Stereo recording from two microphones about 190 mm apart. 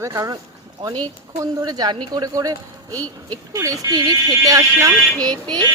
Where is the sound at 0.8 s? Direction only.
30° right (ahead or behind).